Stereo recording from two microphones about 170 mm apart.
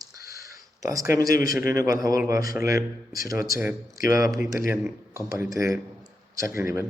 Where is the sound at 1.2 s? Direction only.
20° right (ahead or behind).